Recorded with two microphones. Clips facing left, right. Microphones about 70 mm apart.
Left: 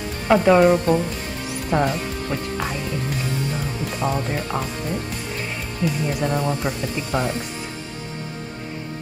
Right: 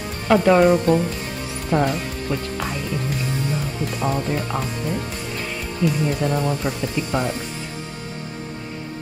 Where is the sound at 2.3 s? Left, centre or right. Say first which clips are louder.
Right 3 dB; left.